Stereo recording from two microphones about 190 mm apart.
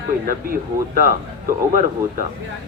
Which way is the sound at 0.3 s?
50° right (ahead or behind).